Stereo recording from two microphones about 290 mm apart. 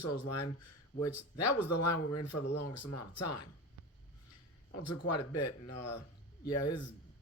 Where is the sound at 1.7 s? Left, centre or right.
Left.